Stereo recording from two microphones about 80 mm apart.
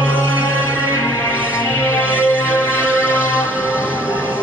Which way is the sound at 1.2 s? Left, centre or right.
Left.